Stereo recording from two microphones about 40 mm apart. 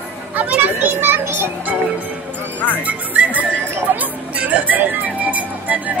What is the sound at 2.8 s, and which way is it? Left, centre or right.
Speech, right.